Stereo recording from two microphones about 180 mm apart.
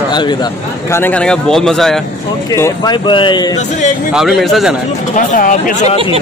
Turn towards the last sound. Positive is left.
turn(degrees=40)  # may be behind; listen again after turning